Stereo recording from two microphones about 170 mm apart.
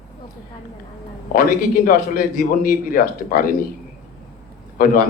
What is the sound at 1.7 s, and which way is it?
Speech, 55° left (ahead or behind).